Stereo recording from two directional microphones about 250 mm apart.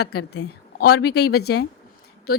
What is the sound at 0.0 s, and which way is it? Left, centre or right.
Speech, left.